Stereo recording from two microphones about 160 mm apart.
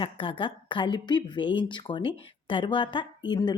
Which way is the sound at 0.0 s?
30° left (ahead or behind).